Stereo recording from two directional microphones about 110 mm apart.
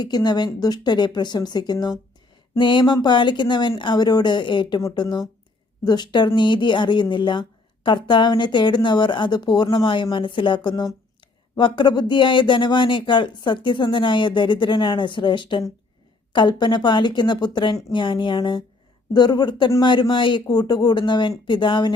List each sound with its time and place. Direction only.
0.0 s a woman's voice: 40° left (ahead or behind)